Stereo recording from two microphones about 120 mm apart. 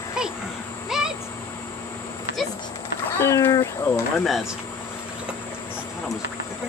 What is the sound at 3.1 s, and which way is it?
Speech, 20° left (ahead or behind).